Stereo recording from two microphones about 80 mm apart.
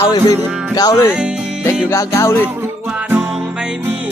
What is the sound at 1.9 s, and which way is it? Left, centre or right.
Music, left.